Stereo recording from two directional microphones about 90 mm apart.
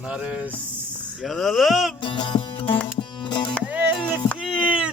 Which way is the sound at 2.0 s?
65° left (ahead or behind).